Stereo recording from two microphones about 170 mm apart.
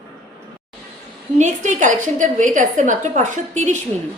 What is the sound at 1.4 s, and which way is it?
A woman's voice, 45° right (ahead or behind).